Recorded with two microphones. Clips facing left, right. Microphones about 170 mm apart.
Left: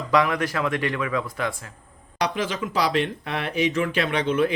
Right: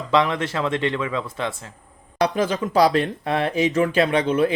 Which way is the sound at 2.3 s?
40° right (ahead or behind).